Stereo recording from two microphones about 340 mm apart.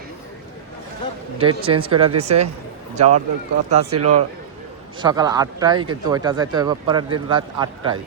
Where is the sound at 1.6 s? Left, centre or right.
Centre.